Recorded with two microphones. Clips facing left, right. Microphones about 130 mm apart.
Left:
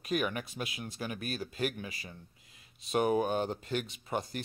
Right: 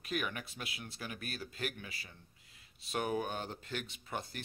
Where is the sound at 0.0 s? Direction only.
20° left (ahead or behind).